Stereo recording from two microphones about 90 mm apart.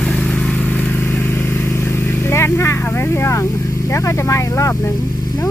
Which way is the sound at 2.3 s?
30° left (ahead or behind).